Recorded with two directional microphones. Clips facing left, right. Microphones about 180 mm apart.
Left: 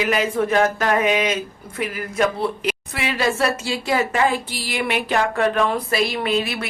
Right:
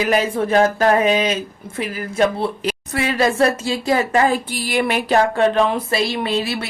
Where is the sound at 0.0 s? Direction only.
35° right (ahead or behind).